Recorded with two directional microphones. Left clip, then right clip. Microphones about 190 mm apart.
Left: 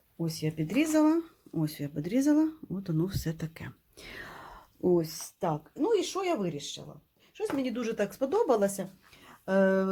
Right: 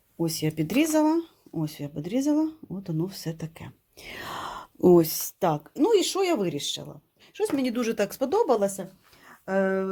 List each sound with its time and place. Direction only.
0.2 s speech: 55° right (ahead or behind)
0.9 s speech: 10° right (ahead or behind)
4.1 s a sound: 20° right (ahead or behind)
4.4 s a sound: 35° right (ahead or behind)
5.7 s speech: 55° right (ahead or behind)
8.3 s speech: 25° right (ahead or behind)
8.5 s speech: 5° right (ahead or behind)